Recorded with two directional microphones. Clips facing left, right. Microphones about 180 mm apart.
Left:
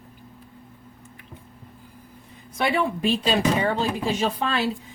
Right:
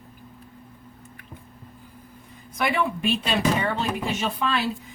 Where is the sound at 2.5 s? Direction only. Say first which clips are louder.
Left 1 dB; 30° left (ahead or behind).